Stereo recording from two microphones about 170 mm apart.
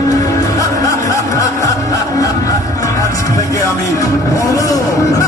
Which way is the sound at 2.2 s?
20° left (ahead or behind).